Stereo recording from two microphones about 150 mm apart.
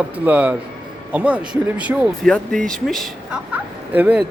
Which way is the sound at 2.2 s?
5° left (ahead or behind).